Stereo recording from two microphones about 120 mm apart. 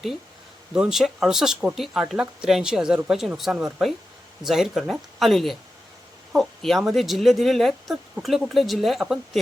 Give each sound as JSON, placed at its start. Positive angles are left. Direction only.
{"t": 0.7, "sound": "speech", "side_deg": -5}